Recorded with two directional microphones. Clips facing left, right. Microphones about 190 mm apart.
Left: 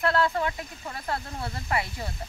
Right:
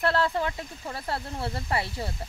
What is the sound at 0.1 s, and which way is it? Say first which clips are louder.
Speech: left 1 dB; 30° right (ahead or behind).